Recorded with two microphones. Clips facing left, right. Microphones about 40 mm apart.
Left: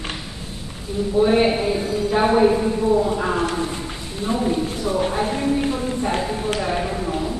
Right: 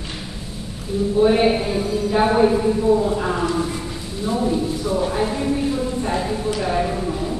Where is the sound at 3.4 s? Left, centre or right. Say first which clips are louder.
Right 1 dB; left.